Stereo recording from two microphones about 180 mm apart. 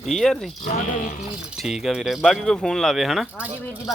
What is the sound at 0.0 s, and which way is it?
Speech, centre (ahead or behind).